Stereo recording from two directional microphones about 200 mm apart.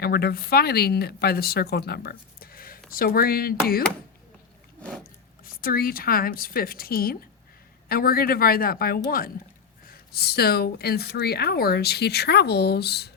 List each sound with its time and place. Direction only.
0.0 s a woman's voice: 50° left (ahead or behind)
5.5 s a woman's voice: 45° left (ahead or behind)